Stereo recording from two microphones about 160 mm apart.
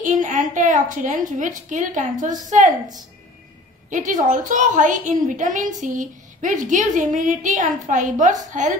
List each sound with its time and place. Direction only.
0.0 s a woman's voice: 50° right (ahead or behind)
3.9 s a woman's voice: 50° right (ahead or behind)